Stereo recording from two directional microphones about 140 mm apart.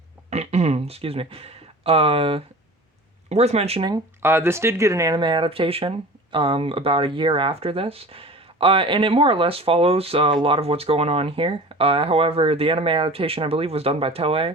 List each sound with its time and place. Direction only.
0.3 s a sound: 50° right (ahead or behind)
3.2 s speech: 50° right (ahead or behind)
4.2 s speech: 15° right (ahead or behind); by 14.5 s 40° right (ahead or behind)